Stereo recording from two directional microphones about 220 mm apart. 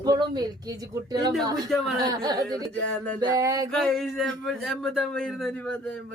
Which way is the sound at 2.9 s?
5° left (ahead or behind).